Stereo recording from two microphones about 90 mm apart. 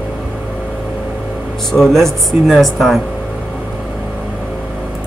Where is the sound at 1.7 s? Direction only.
5° left (ahead or behind).